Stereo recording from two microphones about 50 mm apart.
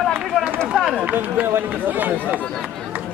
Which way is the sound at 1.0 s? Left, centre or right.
Right.